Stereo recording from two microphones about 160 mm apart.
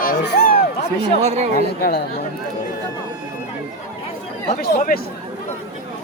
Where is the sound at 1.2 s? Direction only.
45° right (ahead or behind).